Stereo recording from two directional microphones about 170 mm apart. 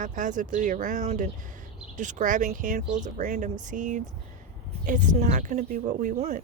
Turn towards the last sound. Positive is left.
turn(degrees=-45)  # may be behind; listen again after turning